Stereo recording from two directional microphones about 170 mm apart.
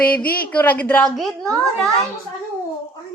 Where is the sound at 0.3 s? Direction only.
10° left (ahead or behind).